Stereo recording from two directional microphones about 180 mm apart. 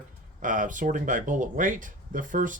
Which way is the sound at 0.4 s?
45° right (ahead or behind).